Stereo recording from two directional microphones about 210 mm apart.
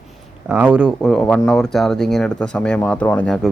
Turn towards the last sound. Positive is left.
turn(degrees=5)  # may be behind; listen again after turning